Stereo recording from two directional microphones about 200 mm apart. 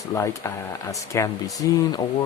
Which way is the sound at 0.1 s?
15° left (ahead or behind).